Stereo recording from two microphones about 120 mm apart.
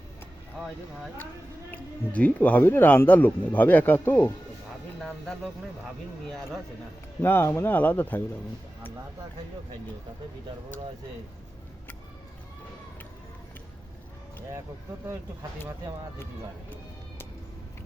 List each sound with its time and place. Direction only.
1.7 s speech: 10° left (ahead or behind)
4.9 s speech: centre (ahead or behind)
7.2 s speech: 15° left (ahead or behind)